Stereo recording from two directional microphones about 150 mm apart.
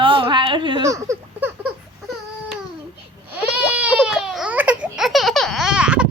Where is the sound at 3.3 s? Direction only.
10° right (ahead or behind).